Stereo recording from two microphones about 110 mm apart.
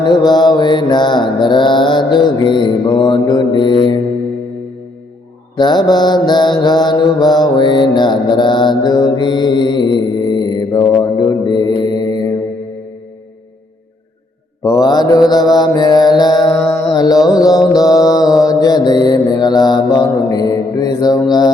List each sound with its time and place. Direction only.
0.0 s mantra: 40° left (ahead or behind)
5.5 s mantra: 40° left (ahead or behind)
14.6 s mantra: 35° left (ahead or behind)